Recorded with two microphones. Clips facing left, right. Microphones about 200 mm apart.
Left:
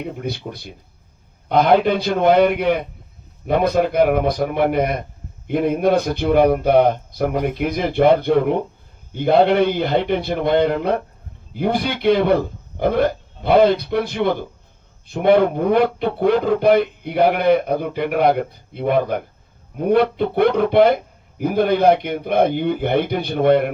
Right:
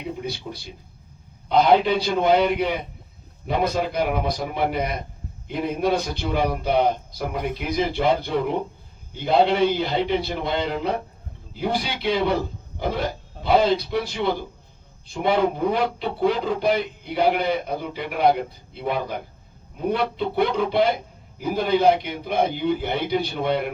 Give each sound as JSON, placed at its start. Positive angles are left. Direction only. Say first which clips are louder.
{"t": 0.0, "sound": "a man's voice", "louder": "left 4 dB", "side_deg": 55}